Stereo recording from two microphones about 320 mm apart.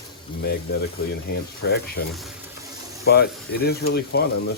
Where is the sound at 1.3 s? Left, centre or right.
Left.